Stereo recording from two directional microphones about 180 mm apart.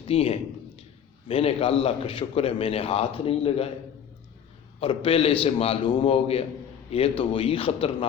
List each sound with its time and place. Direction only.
0.1 s a man's voice: 35° left (ahead or behind)
4.8 s a man's voice: 30° left (ahead or behind)